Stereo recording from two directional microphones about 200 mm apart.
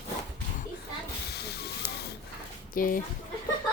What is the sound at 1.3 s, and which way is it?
Hiss, 55° left (ahead or behind).